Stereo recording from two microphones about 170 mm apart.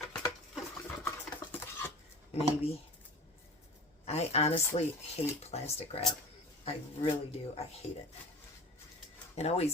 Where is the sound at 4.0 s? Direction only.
40° left (ahead or behind).